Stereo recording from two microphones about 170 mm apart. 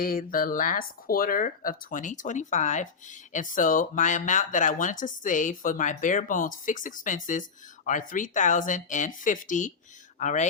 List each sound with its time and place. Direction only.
0.0 s speech: 55° left (ahead or behind)